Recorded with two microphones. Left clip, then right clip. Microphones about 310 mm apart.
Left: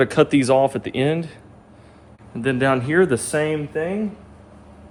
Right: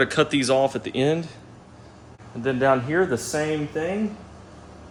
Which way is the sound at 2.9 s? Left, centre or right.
Left.